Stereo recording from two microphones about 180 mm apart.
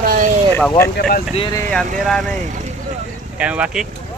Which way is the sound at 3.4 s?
5° right (ahead or behind).